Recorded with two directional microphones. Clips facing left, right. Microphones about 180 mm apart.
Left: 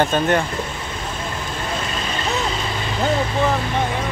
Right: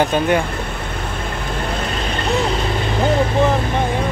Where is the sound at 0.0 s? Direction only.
10° right (ahead or behind).